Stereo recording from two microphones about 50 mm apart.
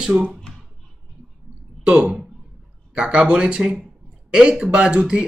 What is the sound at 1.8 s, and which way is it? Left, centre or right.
Speech, right.